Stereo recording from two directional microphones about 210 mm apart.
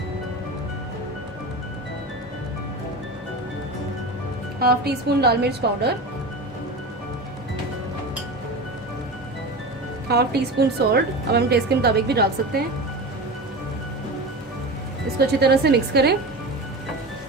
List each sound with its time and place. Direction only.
4.6 s a woman's voice: 50° right (ahead or behind)
10.1 s a woman's voice: 50° right (ahead or behind)
15.4 s a woman's voice: 50° right (ahead or behind)